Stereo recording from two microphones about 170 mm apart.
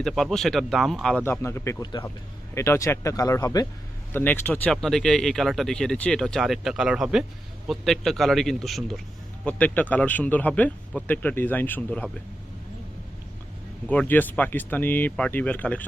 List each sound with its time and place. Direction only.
0.0 s speech: centre (ahead or behind)
1.2 s speech: 15° left (ahead or behind)
13.8 s speech: 10° left (ahead or behind)